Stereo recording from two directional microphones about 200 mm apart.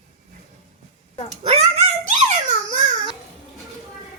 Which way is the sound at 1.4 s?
30° right (ahead or behind).